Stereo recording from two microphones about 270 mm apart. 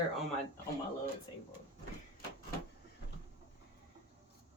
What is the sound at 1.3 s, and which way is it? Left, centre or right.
Speech, centre.